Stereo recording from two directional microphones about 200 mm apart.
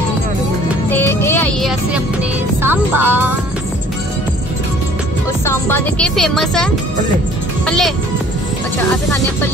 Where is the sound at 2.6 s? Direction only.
10° right (ahead or behind).